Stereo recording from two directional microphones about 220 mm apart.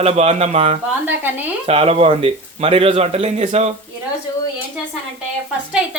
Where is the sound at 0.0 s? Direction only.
30° right (ahead or behind).